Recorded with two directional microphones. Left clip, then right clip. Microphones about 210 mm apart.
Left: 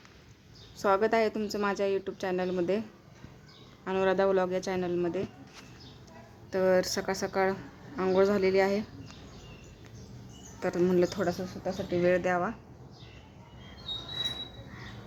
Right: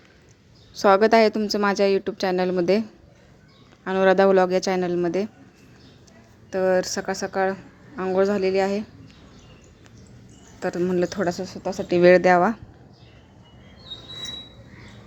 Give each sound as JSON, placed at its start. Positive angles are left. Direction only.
{"t": 0.8, "sound": "a woman's voice", "side_deg": -25}
{"t": 3.8, "sound": "a woman's voice", "side_deg": -25}
{"t": 6.5, "sound": "a woman's voice", "side_deg": -10}
{"t": 10.6, "sound": "a woman's voice", "side_deg": -10}